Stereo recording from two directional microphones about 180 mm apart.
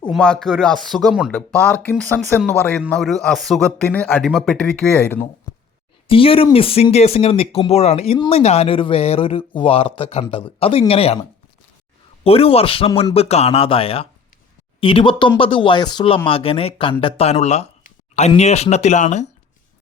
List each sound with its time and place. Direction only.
0.0 s speech: 5° left (ahead or behind)
6.1 s speech: 30° left (ahead or behind)